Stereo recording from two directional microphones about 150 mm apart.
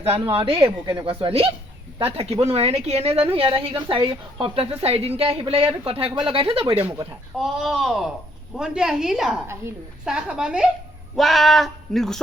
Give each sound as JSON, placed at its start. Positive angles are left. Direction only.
{"t": 0.0, "sound": "a woman's voice", "side_deg": -40}
{"t": 7.3, "sound": "speech", "side_deg": 0}